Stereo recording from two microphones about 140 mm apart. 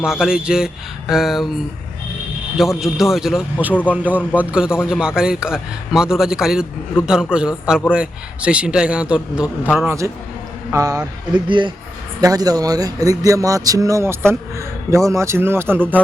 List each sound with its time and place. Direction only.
0.0 s a man's voice: 5° right (ahead or behind)
2.8 s a man's voice: centre (ahead or behind)
9.8 s a man's voice: 20° right (ahead or behind)
11.4 s a man's voice: 35° right (ahead or behind); by 15.8 s 15° right (ahead or behind)